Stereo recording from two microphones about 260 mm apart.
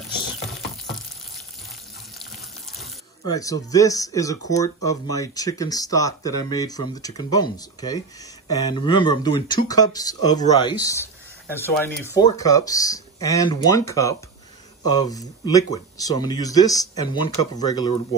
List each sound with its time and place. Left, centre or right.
3.3 s speech: centre